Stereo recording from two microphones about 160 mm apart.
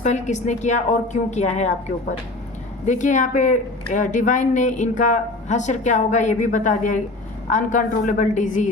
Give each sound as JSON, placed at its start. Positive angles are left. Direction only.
{"t": 0.0, "sound": "a woman's voice", "side_deg": 45}
{"t": 2.8, "sound": "a woman's voice", "side_deg": 50}